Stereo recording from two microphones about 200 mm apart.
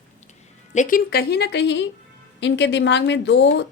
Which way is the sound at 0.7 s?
40° left (ahead or behind).